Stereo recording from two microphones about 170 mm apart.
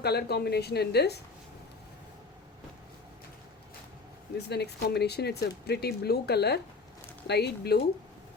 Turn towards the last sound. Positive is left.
turn(degrees=70)  # may be behind; listen again after turning